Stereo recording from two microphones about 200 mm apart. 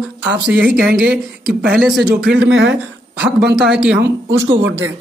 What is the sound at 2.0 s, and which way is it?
Speech, 55° right (ahead or behind).